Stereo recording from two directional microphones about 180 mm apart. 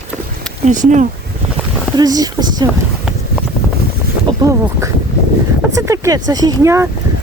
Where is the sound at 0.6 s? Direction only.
40° right (ahead or behind).